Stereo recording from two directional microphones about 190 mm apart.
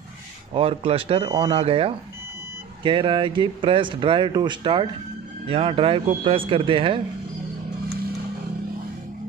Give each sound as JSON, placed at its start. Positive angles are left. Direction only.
{"t": 0.6, "sound": "speech", "side_deg": -30}